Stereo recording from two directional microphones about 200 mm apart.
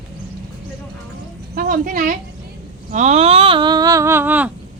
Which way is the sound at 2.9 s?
35° right (ahead or behind).